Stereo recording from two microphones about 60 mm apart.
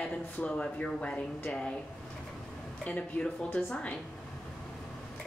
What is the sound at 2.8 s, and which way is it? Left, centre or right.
Speech, left.